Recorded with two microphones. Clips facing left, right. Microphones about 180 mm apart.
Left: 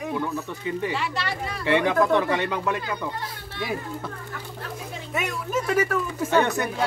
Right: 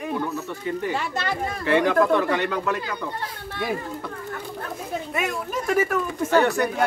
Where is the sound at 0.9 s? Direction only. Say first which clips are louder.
Right 2 dB; 45° right (ahead or behind).